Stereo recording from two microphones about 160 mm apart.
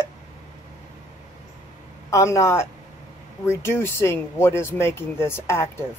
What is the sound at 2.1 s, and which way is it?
Speech, 20° left (ahead or behind).